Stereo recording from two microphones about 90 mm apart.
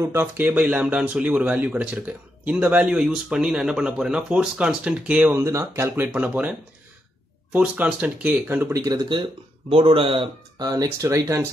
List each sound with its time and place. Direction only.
0.0 s speech: 30° right (ahead or behind)
5.3 s speech: 30° right (ahead or behind)
6.1 s speech: 15° right (ahead or behind)
7.5 s speech: 15° right (ahead or behind)
9.1 s speech: 75° right (ahead or behind)
10.6 s speech: 45° right (ahead or behind)